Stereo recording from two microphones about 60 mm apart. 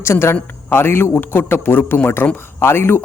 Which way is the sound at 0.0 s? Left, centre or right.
Left.